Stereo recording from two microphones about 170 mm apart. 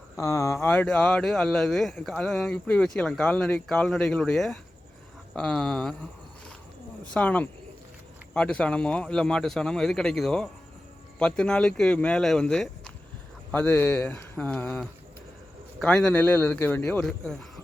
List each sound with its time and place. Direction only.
0.2 s speech: 15° left (ahead or behind)
7.1 s speech: 10° left (ahead or behind)